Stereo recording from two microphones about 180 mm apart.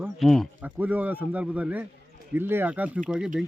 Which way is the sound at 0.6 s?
10° right (ahead or behind).